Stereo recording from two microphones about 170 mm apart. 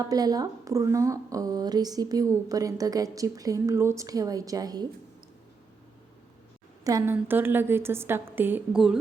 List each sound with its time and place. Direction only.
0.0 s a woman's voice: 20° right (ahead or behind)
6.8 s a woman's voice: 15° right (ahead or behind)